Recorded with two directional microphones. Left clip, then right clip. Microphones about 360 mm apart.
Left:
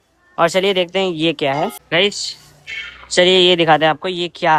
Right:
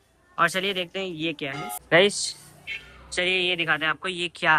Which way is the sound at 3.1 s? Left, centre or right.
Centre.